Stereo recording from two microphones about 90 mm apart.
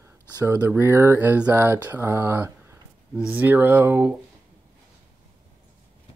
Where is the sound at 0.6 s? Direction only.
25° right (ahead or behind).